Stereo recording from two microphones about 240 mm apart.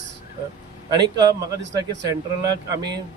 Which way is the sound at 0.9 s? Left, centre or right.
Centre.